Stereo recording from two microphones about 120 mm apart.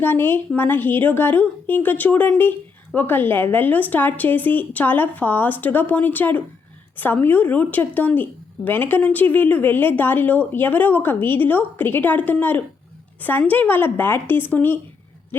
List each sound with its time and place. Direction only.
0.0 s a woman's voice: 20° left (ahead or behind)